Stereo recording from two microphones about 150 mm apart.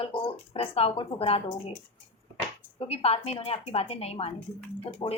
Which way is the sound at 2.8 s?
40° left (ahead or behind).